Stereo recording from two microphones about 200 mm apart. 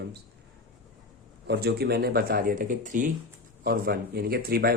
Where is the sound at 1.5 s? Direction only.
55° right (ahead or behind).